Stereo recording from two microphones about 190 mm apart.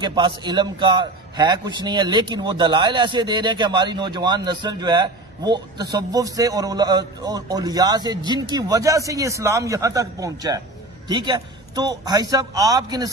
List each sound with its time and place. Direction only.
0.0 s a man's voice: 25° right (ahead or behind)